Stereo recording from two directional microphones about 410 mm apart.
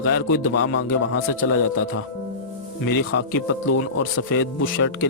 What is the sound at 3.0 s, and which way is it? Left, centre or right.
Speech, left.